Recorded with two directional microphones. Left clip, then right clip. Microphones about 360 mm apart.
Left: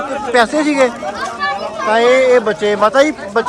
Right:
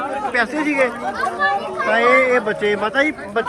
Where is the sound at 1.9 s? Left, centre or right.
Centre.